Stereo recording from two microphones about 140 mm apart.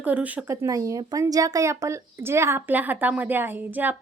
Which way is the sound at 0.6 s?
25° right (ahead or behind).